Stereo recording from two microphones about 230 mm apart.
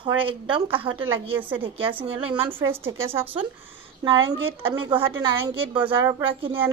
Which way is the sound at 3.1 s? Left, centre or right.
Right.